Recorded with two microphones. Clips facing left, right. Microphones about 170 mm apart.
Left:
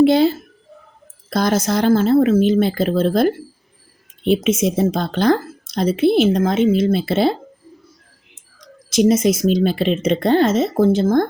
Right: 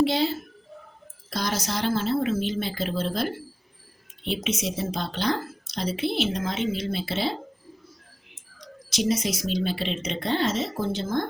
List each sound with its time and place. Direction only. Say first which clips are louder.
0.0 s speech: left 10 dB; 50° left (ahead or behind)
8.9 s speech: left 11 dB; 50° left (ahead or behind)